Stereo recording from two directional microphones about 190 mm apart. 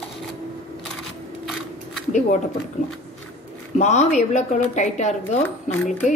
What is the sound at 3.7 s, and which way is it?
Speech, 35° left (ahead or behind).